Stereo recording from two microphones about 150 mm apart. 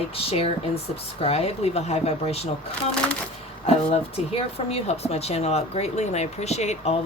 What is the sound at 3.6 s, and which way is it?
Speech, 40° left (ahead or behind).